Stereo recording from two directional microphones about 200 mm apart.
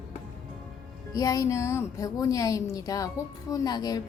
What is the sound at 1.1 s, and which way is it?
A woman's voice, 15° left (ahead or behind).